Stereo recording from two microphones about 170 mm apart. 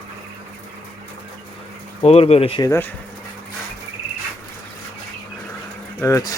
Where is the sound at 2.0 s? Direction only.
35° left (ahead or behind).